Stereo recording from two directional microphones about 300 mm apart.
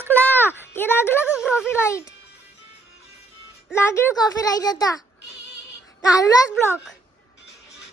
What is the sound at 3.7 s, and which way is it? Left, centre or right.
Speech, centre.